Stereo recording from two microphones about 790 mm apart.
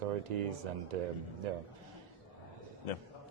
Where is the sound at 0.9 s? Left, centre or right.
Right.